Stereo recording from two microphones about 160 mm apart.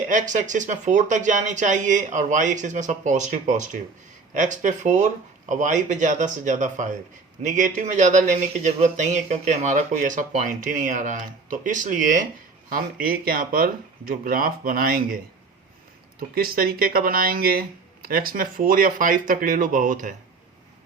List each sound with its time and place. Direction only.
0.1 s speech: 50° right (ahead or behind)
16.3 s speech: 70° right (ahead or behind)